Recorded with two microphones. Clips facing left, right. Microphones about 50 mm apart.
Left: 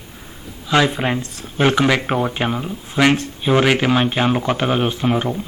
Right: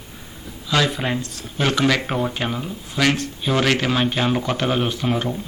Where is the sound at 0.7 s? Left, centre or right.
Left.